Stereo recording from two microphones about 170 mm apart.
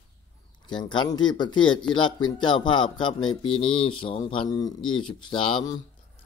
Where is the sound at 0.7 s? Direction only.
25° left (ahead or behind).